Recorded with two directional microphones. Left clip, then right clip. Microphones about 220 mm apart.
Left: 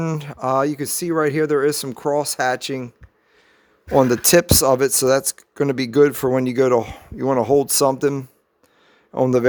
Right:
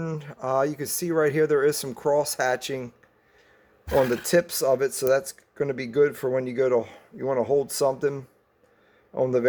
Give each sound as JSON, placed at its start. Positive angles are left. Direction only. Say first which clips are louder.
{"t": 0.0, "sound": "speech", "louder": "left 7 dB", "side_deg": 45}
{"t": 3.9, "sound": "speech", "louder": "left 6 dB", "side_deg": 50}